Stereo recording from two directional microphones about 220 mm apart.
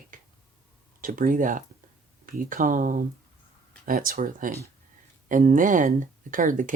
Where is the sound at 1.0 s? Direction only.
40° right (ahead or behind).